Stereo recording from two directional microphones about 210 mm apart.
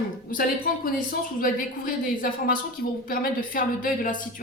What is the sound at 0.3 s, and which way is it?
A woman's voice, 40° left (ahead or behind).